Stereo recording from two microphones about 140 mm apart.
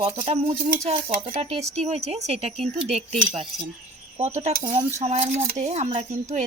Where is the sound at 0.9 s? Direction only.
45° right (ahead or behind).